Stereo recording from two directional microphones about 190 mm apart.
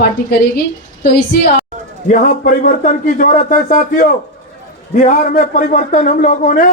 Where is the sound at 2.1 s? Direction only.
45° left (ahead or behind).